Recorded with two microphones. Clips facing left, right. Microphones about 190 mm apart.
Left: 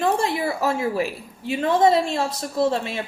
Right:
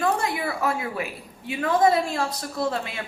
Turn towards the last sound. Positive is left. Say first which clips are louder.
# left 5 dB
turn(degrees=25)  # may be behind; listen again after turning